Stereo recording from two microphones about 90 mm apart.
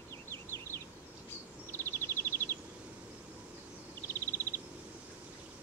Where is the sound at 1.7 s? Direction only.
25° left (ahead or behind).